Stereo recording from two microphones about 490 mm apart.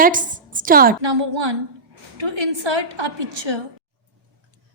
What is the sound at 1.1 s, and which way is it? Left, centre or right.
A woman's voice, right.